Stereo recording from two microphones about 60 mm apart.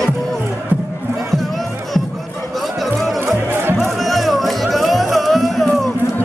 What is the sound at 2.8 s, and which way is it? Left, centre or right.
Music, centre.